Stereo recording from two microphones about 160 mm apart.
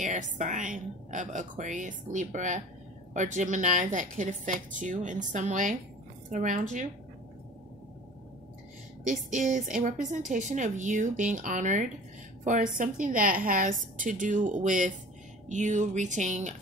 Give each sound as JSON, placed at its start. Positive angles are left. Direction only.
{"t": 0.0, "sound": "a woman's voice", "side_deg": -50}
{"t": 9.0, "sound": "a woman's voice", "side_deg": -50}